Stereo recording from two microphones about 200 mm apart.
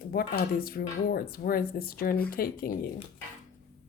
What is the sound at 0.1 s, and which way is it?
Speech, 50° left (ahead or behind).